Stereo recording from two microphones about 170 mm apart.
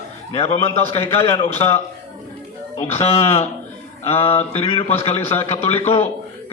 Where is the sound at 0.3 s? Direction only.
40° left (ahead or behind).